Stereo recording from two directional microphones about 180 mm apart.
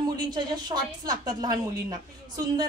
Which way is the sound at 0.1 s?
20° right (ahead or behind).